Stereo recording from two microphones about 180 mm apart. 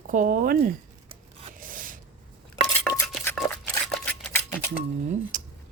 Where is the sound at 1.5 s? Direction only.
50° right (ahead or behind).